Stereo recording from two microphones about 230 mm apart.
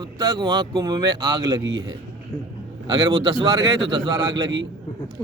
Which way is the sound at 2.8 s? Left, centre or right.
Centre.